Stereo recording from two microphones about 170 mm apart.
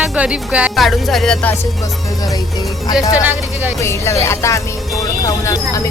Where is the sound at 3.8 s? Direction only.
15° left (ahead or behind).